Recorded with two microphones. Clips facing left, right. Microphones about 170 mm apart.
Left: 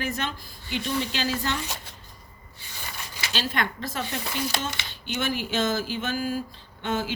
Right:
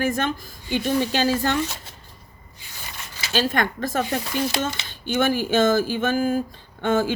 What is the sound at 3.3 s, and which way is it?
Speech, 50° right (ahead or behind).